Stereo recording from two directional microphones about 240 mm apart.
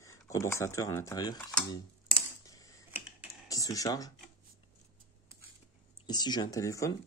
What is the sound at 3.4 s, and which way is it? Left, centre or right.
Speech, centre.